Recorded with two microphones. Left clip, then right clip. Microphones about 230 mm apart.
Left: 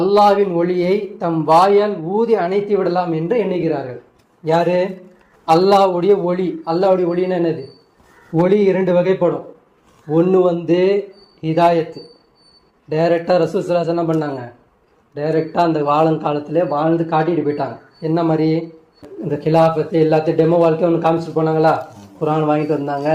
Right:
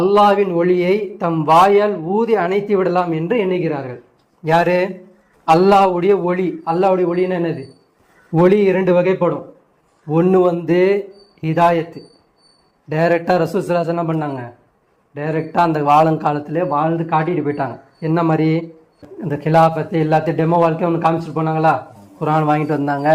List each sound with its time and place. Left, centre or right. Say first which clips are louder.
0.0 s speech: even; right
4.4 s a man's voice: right 1 dB; right
12.9 s a man's voice: even; right